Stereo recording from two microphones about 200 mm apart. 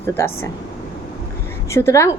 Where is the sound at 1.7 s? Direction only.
15° left (ahead or behind).